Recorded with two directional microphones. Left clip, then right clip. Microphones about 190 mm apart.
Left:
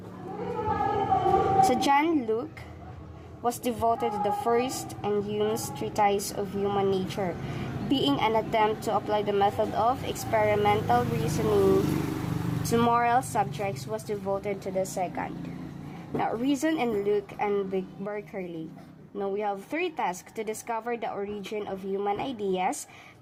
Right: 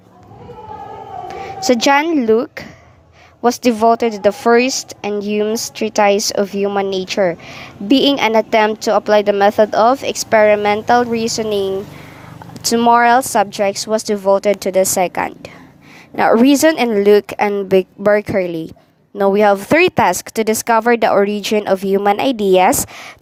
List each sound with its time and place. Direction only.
1.6 s speech: 40° right (ahead or behind)
12.7 s speech: 45° right (ahead or behind)